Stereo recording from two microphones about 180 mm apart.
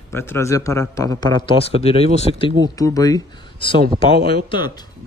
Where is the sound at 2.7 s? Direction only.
20° left (ahead or behind).